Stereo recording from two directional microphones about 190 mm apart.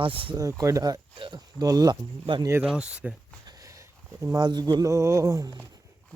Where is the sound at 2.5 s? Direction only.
5° right (ahead or behind).